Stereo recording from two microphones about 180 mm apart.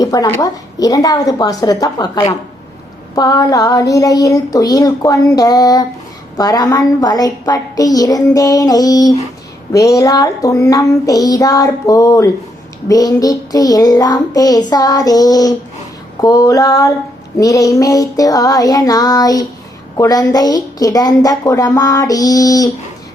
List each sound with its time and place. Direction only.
0.0 s a woman's voice: 20° left (ahead or behind)